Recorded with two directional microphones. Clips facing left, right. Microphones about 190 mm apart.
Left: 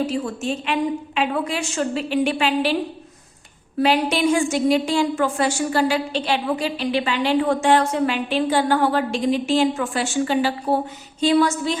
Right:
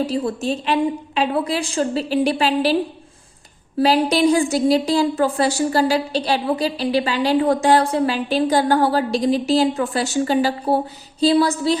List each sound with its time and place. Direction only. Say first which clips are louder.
0.0 s a woman's voice: right 2 dB; 35° right (ahead or behind)
3.8 s a woman's voice: right 3 dB; 35° right (ahead or behind)